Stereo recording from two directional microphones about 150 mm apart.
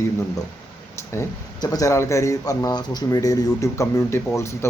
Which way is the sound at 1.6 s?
20° left (ahead or behind).